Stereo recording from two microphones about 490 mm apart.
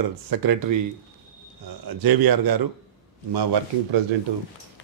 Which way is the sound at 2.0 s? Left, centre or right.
Right.